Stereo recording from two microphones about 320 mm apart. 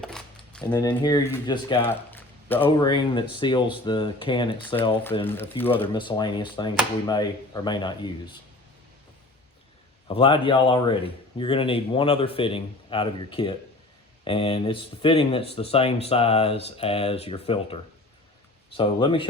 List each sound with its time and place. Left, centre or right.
0.0 s coin: centre
0.7 s a man's voice: centre
10.1 s a man's voice: centre
18.8 s a man's voice: centre